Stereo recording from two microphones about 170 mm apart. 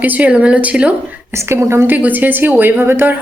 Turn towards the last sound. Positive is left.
turn(degrees=-15)  # may be behind; listen again after turning